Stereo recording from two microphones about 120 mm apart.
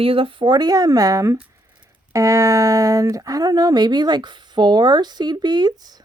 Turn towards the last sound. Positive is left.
turn(degrees=-35)  # may be behind; listen again after turning